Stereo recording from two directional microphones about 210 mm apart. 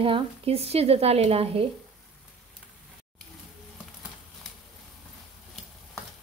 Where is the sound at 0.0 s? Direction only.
25° right (ahead or behind).